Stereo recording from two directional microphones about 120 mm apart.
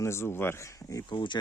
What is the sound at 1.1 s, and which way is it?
Speech, 40° left (ahead or behind).